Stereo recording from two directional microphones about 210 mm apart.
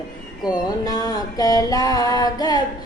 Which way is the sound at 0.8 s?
20° left (ahead or behind).